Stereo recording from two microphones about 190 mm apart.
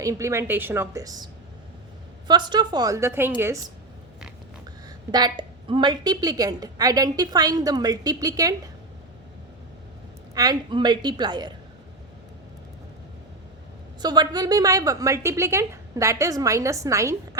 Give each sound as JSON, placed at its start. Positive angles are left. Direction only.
{"t": 0.0, "sound": "a woman's voice", "side_deg": -15}
{"t": 5.1, "sound": "a woman's voice", "side_deg": -25}
{"t": 10.3, "sound": "a woman's voice", "side_deg": -20}
{"t": 14.0, "sound": "a woman's voice", "side_deg": -20}